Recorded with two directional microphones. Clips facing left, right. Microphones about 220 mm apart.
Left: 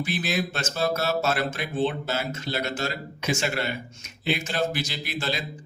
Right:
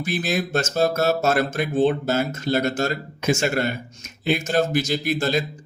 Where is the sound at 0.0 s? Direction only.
45° right (ahead or behind).